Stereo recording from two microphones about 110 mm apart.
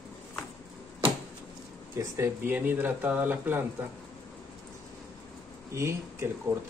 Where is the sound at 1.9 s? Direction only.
25° right (ahead or behind).